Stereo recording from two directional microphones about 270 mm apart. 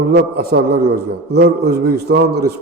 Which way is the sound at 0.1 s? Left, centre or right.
Right.